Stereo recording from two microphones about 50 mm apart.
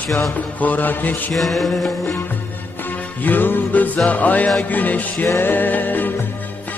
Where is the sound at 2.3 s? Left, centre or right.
Left.